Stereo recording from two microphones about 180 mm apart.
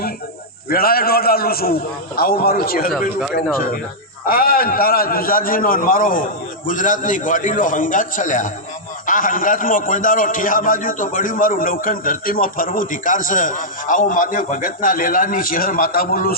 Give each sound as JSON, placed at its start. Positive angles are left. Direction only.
{"t": 0.7, "sound": "a man's voice", "side_deg": 55}